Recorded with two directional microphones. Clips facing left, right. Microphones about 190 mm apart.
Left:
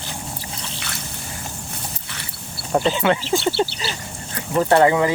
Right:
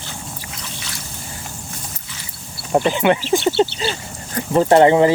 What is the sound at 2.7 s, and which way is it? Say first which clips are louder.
Speech: right 3 dB; 20° right (ahead or behind).